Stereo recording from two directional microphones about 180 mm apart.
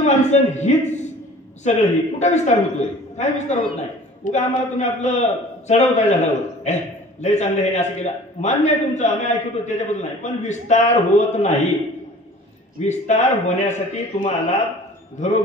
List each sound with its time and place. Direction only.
0.0 s a man's voice: 40° left (ahead or behind)
12.8 s a man's voice: 40° left (ahead or behind)